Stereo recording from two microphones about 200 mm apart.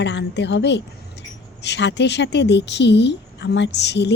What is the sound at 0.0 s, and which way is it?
A woman's voice, 60° left (ahead or behind).